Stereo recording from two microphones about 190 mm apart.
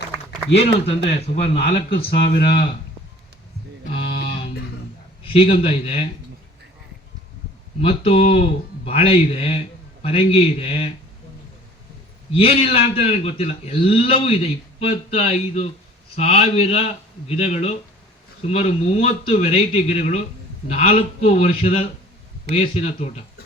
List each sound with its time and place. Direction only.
0.5 s a man's voice: 30° left (ahead or behind)
2.0 s speech: 55° left (ahead or behind)
5.2 s a man's voice: 30° left (ahead or behind)
7.8 s a man's voice: 30° left (ahead or behind)
12.3 s a man's voice: 30° left (ahead or behind)